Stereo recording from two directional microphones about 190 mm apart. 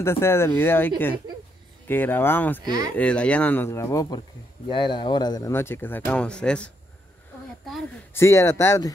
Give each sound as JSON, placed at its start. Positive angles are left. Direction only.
{"t": 0.0, "sound": "speech", "side_deg": 15}
{"t": 2.6, "sound": "speech", "side_deg": -20}
{"t": 3.0, "sound": "speech", "side_deg": 5}
{"t": 8.1, "sound": "speech", "side_deg": 15}